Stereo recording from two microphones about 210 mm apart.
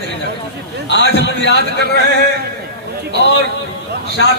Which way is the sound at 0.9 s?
55° left (ahead or behind).